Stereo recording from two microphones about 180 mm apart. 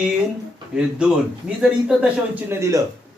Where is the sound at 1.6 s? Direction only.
5° right (ahead or behind).